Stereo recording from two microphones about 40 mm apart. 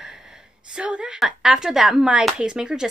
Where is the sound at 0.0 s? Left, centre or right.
Centre.